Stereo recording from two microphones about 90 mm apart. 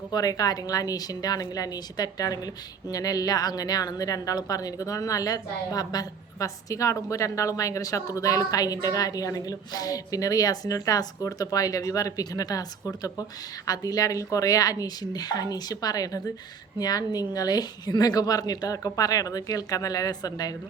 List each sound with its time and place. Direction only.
0.1 s a woman's voice: 45° left (ahead or behind)